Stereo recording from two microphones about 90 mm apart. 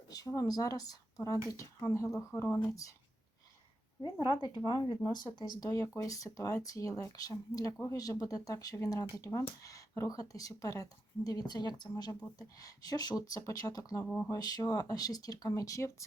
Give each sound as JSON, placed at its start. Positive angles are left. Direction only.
{"t": 0.1, "sound": "speech", "side_deg": 40}
{"t": 4.0, "sound": "speech", "side_deg": 55}
{"t": 5.7, "sound": "speech", "side_deg": 35}